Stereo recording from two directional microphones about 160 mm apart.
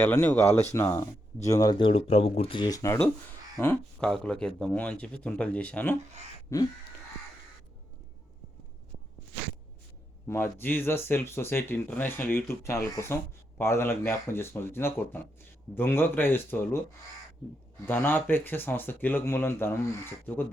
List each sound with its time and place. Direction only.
0.0 s speech: 15° left (ahead or behind)
10.2 s speech: 15° left (ahead or behind)
17.8 s speech: 15° left (ahead or behind)